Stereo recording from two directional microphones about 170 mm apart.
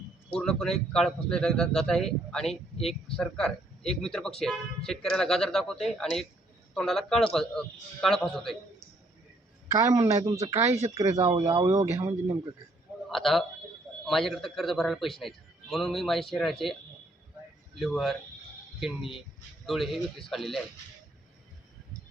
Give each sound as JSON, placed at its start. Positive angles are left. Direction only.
{"t": 0.3, "sound": "a man's voice", "side_deg": 5}
{"t": 9.7, "sound": "a man's voice", "side_deg": -20}
{"t": 13.1, "sound": "a man's voice", "side_deg": 0}
{"t": 17.7, "sound": "a man's voice", "side_deg": 0}